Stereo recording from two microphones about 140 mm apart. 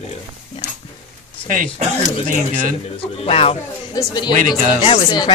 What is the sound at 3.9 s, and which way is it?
Speech, 30° left (ahead or behind).